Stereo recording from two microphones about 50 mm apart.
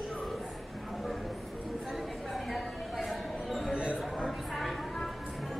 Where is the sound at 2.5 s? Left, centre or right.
Centre.